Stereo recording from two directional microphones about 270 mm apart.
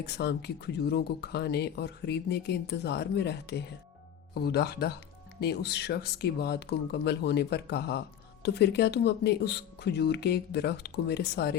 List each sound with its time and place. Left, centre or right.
0.0 s speech: left